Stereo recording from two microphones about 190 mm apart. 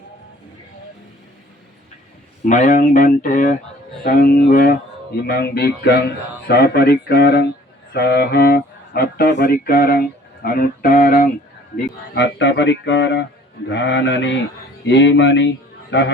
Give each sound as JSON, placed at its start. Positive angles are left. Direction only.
{"t": 2.4, "sound": "speech", "side_deg": 40}
{"t": 12.1, "sound": "speech", "side_deg": 70}